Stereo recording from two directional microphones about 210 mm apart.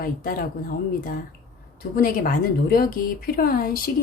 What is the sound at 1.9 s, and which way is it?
A woman's voice, 45° left (ahead or behind).